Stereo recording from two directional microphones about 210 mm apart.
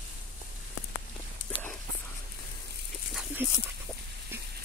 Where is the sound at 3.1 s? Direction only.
5° right (ahead or behind).